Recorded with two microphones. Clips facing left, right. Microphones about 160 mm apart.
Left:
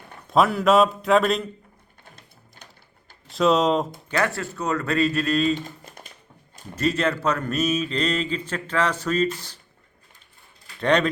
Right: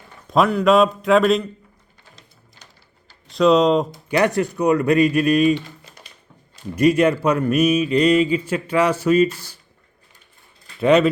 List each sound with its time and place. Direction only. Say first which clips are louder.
0.3 s a man's voice: right 3 dB; centre (ahead or behind)
3.2 s a man's voice: right 5 dB; centre (ahead or behind)
4.1 s speech: right 7 dB; 20° right (ahead or behind)
5.5 s typing: right 3 dB; 50° left (ahead or behind)
6.7 s speech: right 8 dB; 15° right (ahead or behind)
10.8 s speech: right 6 dB; 5° right (ahead or behind)